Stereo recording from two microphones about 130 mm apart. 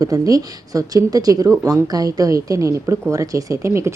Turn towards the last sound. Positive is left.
turn(degrees=-20)  # may be behind; listen again after turning